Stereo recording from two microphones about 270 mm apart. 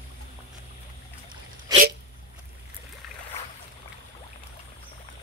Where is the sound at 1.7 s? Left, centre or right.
Centre.